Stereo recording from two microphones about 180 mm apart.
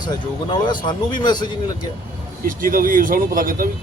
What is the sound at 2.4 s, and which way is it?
Speech, 50° right (ahead or behind).